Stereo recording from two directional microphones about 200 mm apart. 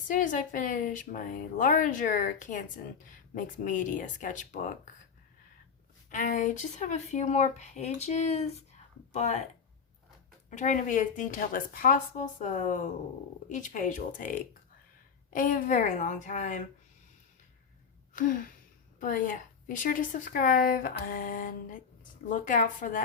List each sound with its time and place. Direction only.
0.1 s speech: 40° left (ahead or behind)
6.1 s speech: 40° left (ahead or behind)
10.5 s speech: 35° left (ahead or behind)
18.1 s gasp: 40° left (ahead or behind)
18.9 s a woman's voice: 40° left (ahead or behind)